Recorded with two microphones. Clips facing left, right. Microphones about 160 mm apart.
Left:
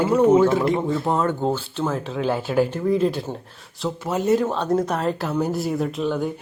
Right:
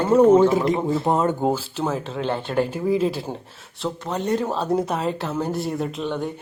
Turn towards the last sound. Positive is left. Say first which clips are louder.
# left 3 dB
turn(degrees=0)  # may be behind; listen again after turning